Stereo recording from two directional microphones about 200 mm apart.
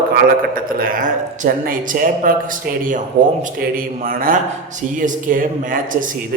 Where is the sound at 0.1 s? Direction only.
45° right (ahead or behind).